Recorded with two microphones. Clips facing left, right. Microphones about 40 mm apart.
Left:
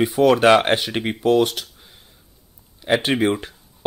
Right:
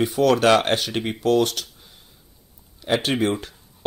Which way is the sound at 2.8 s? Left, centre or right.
Centre.